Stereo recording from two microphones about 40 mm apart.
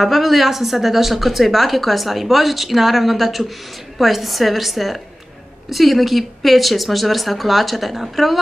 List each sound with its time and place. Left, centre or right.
0.0 s a woman's voice: centre